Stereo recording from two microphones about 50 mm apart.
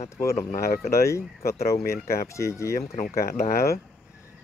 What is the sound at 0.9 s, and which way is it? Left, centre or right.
Speech, left.